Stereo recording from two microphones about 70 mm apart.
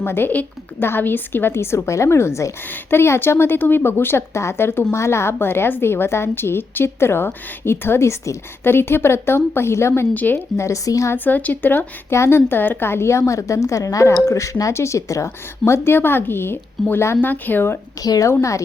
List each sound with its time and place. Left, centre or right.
0.0 s a woman's voice: left
8.6 s a woman's voice: left
10.2 s speech: left
10.6 s a woman's voice: left
11.1 s speech: left
12.1 s a woman's voice: left
17.2 s speech: left
18.0 s speech: left
18.3 s a woman's voice: left